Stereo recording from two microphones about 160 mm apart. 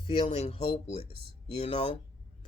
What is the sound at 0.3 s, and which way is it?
Speech, 45° left (ahead or behind).